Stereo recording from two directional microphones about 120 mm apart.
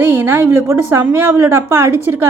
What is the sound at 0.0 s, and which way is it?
Speech, 15° right (ahead or behind).